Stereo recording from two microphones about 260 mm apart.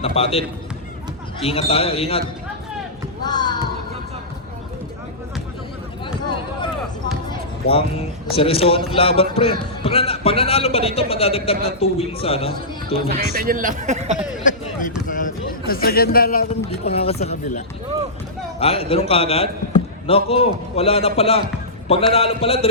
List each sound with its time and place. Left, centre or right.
0.0 s a man's voice: left
3.2 s basketball bounce: centre
7.3 s a man's voice: left
13.1 s speech: right
14.4 s a sound: left
15.0 s a man's voice: left
16.6 s a man's voice: left
18.6 s a man's voice: left